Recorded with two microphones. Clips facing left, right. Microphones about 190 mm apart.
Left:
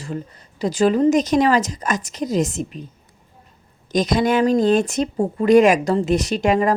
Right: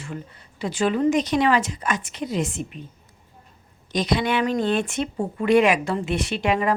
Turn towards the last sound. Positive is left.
turn(degrees=40)  # may be behind; listen again after turning